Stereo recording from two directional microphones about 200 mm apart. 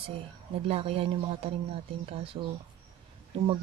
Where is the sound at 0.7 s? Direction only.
30° right (ahead or behind).